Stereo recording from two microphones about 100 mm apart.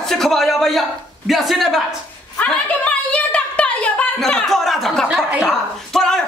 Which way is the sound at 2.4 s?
10° left (ahead or behind).